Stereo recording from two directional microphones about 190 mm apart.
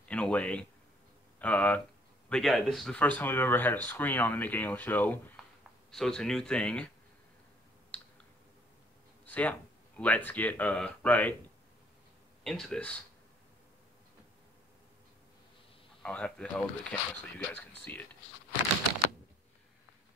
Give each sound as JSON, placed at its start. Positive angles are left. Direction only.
{"t": 0.1, "sound": "speech", "side_deg": 5}
{"t": 7.9, "sound": "clicking", "side_deg": 5}
{"t": 9.2, "sound": "speech", "side_deg": 5}
{"t": 12.4, "sound": "speech", "side_deg": 5}
{"t": 16.0, "sound": "speech", "side_deg": 5}